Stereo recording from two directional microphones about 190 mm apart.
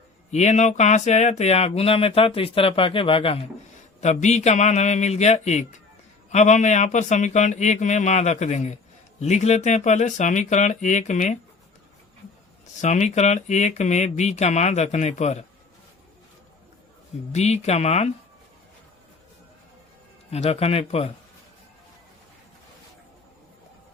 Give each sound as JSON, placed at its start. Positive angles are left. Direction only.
{"t": 0.3, "sound": "speech", "side_deg": 35}
{"t": 12.8, "sound": "speech", "side_deg": 40}
{"t": 17.3, "sound": "speech", "side_deg": 35}
{"t": 20.3, "sound": "speech", "side_deg": 35}